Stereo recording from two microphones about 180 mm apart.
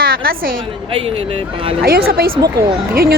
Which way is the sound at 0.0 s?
55° right (ahead or behind).